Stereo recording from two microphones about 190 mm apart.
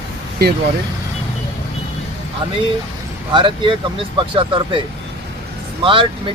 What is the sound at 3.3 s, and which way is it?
Speech, 25° right (ahead or behind).